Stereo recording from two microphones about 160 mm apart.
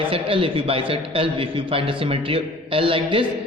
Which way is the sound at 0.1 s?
35° right (ahead or behind).